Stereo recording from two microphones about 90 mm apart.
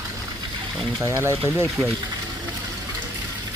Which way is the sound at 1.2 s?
30° right (ahead or behind).